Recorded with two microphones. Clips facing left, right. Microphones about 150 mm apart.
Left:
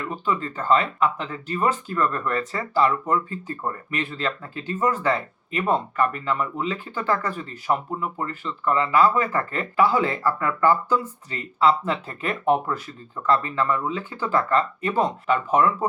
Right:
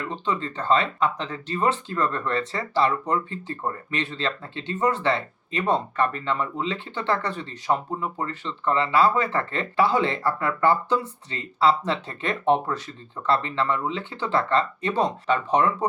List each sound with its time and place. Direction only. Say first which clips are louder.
0.3 s speech: left 2 dB; 30° right (ahead or behind)